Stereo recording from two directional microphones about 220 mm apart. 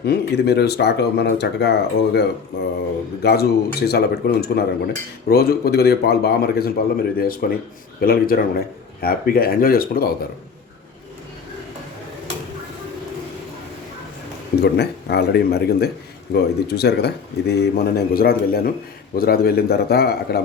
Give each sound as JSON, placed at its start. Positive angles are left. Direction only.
{"t": 0.0, "sound": "speech", "side_deg": 50}
{"t": 3.2, "sound": "speech", "side_deg": 45}
{"t": 14.6, "sound": "speech", "side_deg": 50}